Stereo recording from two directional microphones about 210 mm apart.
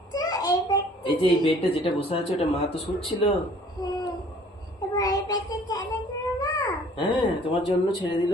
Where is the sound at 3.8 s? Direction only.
20° left (ahead or behind).